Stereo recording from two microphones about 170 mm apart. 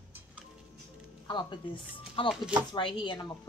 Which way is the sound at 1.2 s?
25° left (ahead or behind).